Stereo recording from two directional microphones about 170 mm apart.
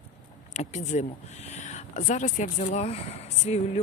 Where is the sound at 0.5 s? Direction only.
45° left (ahead or behind).